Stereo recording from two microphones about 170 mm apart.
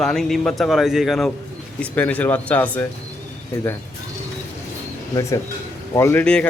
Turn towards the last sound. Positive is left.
turn(degrees=5)  # may be behind; listen again after turning